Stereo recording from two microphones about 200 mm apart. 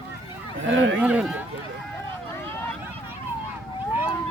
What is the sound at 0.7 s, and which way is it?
Speech, 65° right (ahead or behind).